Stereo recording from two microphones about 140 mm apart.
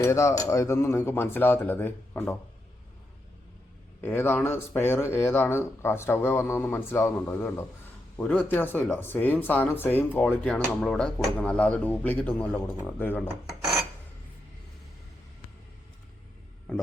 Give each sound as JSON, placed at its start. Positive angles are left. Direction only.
{"t": 0.0, "sound": "speech", "side_deg": 20}
{"t": 4.0, "sound": "speech", "side_deg": 15}
{"t": 13.5, "sound": "filing", "side_deg": -5}
{"t": 16.7, "sound": "a sound", "side_deg": 5}